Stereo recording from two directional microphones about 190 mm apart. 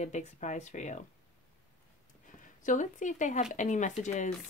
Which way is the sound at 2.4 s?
45° left (ahead or behind).